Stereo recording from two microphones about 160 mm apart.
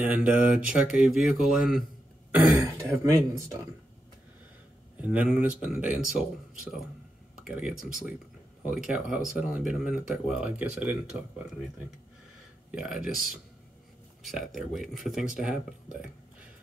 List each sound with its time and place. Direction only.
0.0 s speech: 10° right (ahead or behind)
2.3 s speech: 15° right (ahead or behind)
4.9 s speech: 10° right (ahead or behind)
7.4 s speech: 5° right (ahead or behind)
12.7 s speech: 5° right (ahead or behind)